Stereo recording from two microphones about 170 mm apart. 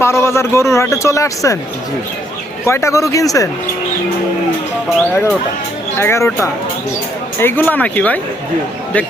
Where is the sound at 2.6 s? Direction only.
15° left (ahead or behind).